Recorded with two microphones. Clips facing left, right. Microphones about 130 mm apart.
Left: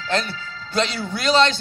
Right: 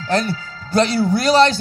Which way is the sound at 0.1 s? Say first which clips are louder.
Right 5 dB; 40° right (ahead or behind).